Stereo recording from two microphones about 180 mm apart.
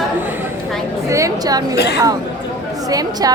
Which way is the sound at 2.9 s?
20° right (ahead or behind).